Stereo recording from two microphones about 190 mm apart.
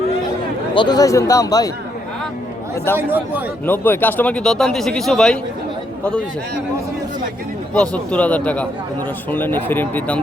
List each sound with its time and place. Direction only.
0.7 s a man's voice: 25° left (ahead or behind)
2.9 s speech: 10° right (ahead or behind)
3.7 s speech: 10° left (ahead or behind)
7.7 s a man's voice: 5° left (ahead or behind)